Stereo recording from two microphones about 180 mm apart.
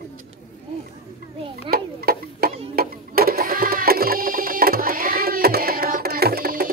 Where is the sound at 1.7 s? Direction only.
55° right (ahead or behind).